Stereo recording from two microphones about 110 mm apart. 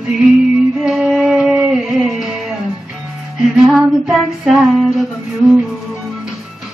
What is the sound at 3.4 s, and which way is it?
Female singing, 5° right (ahead or behind).